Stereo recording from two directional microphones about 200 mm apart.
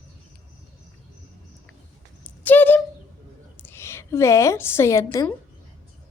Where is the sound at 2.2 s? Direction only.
10° left (ahead or behind).